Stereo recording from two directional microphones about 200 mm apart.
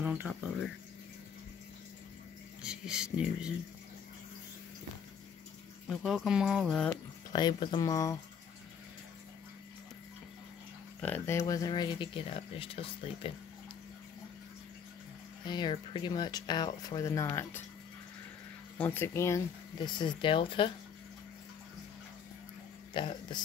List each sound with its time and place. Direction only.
0.0 s speech: 5° right (ahead or behind)
2.6 s speech: 5° right (ahead or behind)
5.9 s speech: centre (ahead or behind)
7.3 s speech: 20° left (ahead or behind)
11.0 s speech: 10° left (ahead or behind); by 13.3 s 25° left (ahead or behind)
15.4 s speech: 25° left (ahead or behind)
18.8 s speech: 10° left (ahead or behind)
22.9 s speech: 25° left (ahead or behind)